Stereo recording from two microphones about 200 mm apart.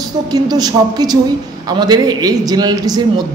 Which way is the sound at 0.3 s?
20° right (ahead or behind).